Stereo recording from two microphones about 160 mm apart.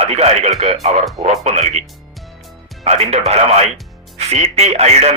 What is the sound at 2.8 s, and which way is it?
Speech, 40° right (ahead or behind).